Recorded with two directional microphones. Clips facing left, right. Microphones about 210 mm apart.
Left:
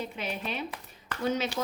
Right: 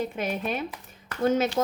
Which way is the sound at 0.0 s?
50° right (ahead or behind).